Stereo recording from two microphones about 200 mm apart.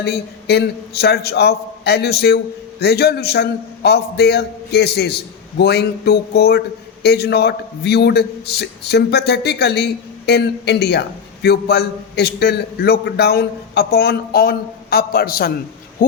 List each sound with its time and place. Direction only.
0.0 s a man's voice: 55° left (ahead or behind)